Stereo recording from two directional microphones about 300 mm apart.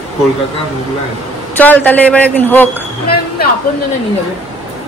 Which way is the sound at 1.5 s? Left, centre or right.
Centre.